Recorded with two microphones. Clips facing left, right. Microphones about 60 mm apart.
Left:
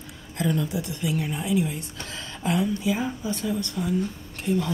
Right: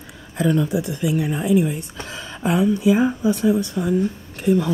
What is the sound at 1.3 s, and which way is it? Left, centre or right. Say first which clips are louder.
Speech: right 8 dB; right.